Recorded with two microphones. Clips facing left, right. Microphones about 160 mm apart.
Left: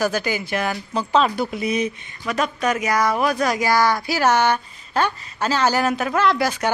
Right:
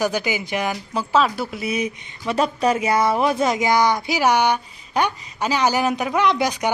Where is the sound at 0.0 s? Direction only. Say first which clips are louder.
Even; 15° right (ahead or behind).